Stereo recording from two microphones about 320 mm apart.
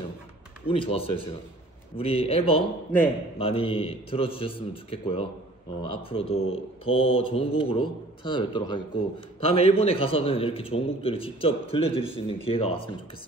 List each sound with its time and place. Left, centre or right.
0.7 s a man's voice: centre